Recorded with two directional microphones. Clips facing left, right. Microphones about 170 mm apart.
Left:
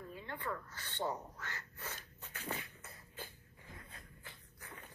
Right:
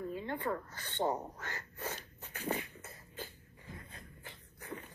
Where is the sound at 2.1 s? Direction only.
45° right (ahead or behind).